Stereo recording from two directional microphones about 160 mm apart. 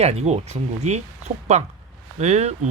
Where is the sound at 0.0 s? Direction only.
40° right (ahead or behind).